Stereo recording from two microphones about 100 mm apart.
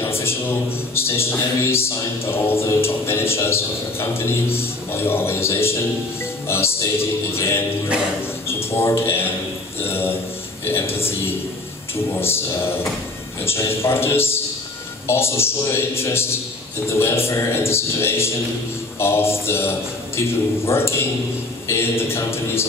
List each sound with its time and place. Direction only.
0.2 s a man's voice: 25° left (ahead or behind)
8.6 s a man's voice: 25° left (ahead or behind)